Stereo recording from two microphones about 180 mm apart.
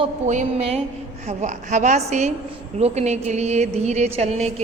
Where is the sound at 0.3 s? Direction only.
40° right (ahead or behind).